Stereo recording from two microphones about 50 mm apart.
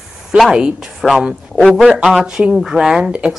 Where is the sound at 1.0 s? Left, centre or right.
Centre.